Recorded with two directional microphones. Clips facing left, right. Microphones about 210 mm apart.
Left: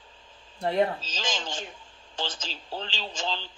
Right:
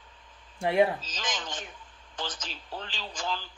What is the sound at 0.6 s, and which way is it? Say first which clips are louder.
Speech: right 1 dB; 10° right (ahead or behind).